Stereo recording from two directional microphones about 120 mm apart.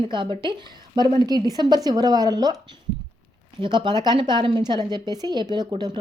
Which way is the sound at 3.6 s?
40° right (ahead or behind).